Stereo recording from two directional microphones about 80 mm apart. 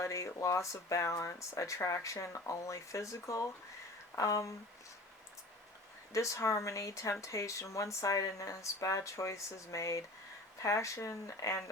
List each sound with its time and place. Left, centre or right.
0.0 s speech: left
6.1 s speech: left